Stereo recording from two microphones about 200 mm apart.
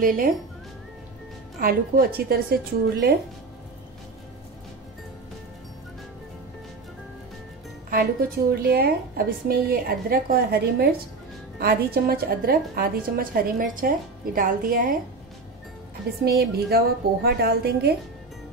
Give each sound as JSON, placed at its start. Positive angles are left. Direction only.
{"t": 0.0, "sound": "a woman's voice", "side_deg": -45}
{"t": 1.6, "sound": "a woman's voice", "side_deg": -45}
{"t": 8.5, "sound": "a woman's voice", "side_deg": -50}
{"t": 16.3, "sound": "a woman's voice", "side_deg": -50}